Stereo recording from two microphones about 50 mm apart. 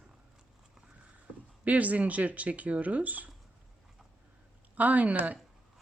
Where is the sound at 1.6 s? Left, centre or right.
Right.